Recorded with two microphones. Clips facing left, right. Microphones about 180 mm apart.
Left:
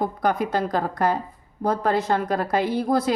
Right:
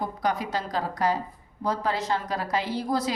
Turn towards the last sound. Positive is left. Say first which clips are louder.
# left 5 dB
turn(degrees=55)  # may be behind; listen again after turning